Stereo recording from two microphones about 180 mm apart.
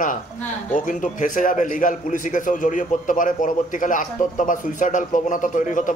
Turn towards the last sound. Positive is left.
turn(degrees=45)  # may be behind; listen again after turning